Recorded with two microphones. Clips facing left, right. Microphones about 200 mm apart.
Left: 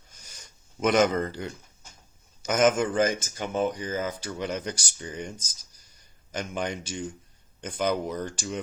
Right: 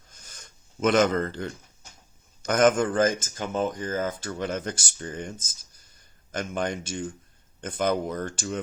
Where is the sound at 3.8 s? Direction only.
50° right (ahead or behind).